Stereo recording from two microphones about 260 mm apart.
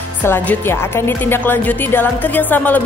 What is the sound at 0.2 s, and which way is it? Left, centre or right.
Speech, centre.